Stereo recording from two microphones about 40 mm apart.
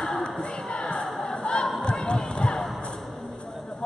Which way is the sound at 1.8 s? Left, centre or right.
Left.